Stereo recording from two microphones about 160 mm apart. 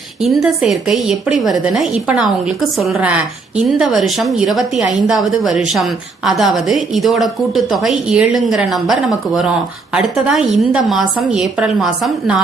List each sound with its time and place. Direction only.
0.2 s a woman's voice: centre (ahead or behind)